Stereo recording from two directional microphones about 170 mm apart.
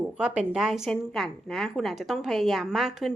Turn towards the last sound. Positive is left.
turn(degrees=0)  # may be behind; listen again after turning